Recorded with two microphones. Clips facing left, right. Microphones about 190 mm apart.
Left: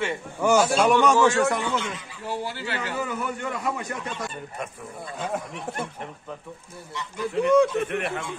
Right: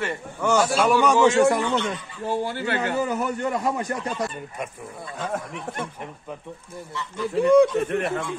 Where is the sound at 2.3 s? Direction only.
50° right (ahead or behind).